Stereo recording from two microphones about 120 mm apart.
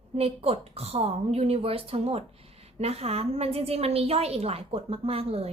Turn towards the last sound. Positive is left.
turn(degrees=-55)  # may be behind; listen again after turning